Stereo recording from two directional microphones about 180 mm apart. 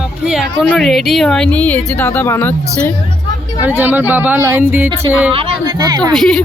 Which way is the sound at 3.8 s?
10° right (ahead or behind).